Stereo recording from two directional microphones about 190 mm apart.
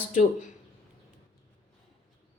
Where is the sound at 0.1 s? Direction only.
40° left (ahead or behind).